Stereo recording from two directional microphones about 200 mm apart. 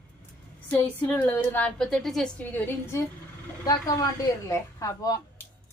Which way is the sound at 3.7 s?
20° left (ahead or behind).